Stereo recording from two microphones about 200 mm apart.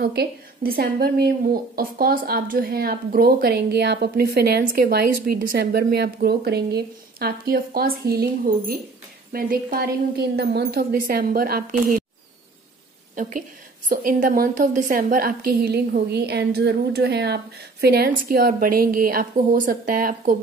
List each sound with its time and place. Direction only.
0.0 s a woman's voice: 50° right (ahead or behind)
13.1 s a woman's voice: 40° right (ahead or behind)